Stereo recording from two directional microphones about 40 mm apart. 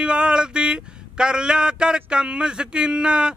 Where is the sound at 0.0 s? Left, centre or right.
Right.